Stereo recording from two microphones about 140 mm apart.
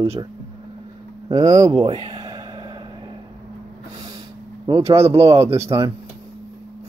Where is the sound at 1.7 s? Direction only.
40° right (ahead or behind).